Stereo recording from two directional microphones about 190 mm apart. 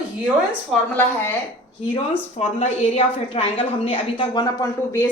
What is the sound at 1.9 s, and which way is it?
A woman's voice, 30° left (ahead or behind).